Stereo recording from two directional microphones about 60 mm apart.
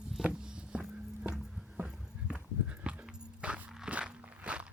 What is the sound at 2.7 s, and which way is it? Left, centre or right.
Dog, right.